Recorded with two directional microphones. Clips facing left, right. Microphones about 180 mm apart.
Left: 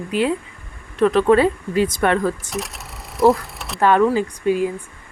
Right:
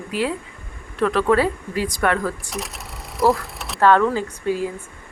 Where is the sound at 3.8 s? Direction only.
15° left (ahead or behind).